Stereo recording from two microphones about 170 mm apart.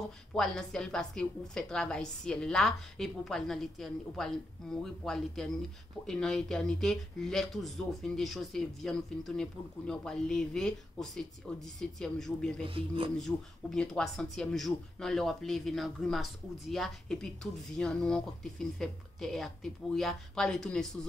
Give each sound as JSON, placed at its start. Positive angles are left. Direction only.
{"t": 0.4, "sound": "speech", "side_deg": 5}
{"t": 12.6, "sound": "speech", "side_deg": -30}
{"t": 13.2, "sound": "speech", "side_deg": 5}